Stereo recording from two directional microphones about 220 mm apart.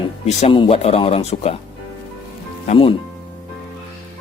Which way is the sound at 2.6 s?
25° left (ahead or behind).